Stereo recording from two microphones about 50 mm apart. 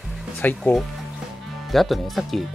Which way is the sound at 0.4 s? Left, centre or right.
Left.